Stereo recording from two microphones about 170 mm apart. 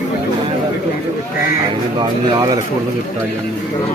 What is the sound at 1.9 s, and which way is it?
Speech, 25° right (ahead or behind).